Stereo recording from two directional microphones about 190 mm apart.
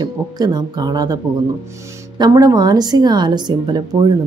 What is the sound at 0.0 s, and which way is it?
A woman's voice, 20° right (ahead or behind).